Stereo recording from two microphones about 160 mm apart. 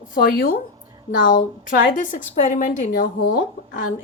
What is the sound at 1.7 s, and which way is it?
A woman's voice, 60° left (ahead or behind).